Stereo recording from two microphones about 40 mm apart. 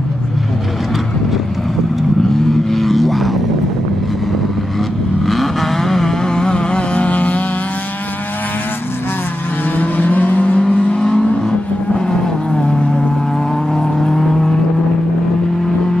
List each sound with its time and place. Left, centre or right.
2.3 s vehicle: centre
5.2 s vehicle: centre; by 7.4 s left
9.8 s vehicle: left
11.0 s vehicle: centre